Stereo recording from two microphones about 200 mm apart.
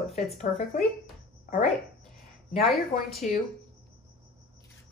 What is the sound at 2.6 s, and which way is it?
Speech, centre (ahead or behind).